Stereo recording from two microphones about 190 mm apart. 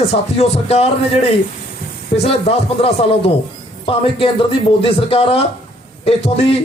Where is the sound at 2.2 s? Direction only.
35° left (ahead or behind).